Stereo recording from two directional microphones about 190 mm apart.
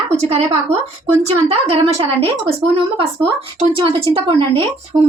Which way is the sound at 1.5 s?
35° right (ahead or behind).